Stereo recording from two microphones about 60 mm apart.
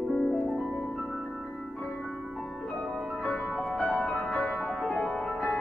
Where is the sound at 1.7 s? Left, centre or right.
Left.